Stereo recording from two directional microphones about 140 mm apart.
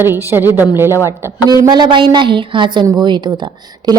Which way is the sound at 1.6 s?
30° right (ahead or behind).